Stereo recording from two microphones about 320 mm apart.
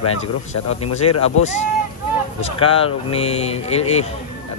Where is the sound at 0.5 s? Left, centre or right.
Left.